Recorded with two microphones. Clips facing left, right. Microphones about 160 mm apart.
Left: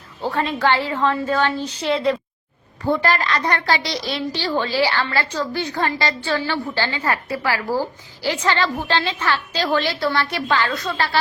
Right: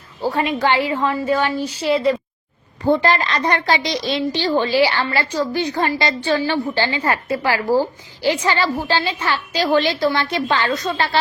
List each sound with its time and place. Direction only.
0.2 s a woman's voice: 10° right (ahead or behind)
2.8 s a woman's voice: 20° right (ahead or behind)